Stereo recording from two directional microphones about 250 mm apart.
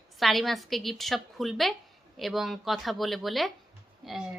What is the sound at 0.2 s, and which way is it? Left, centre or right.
A woman's voice, centre.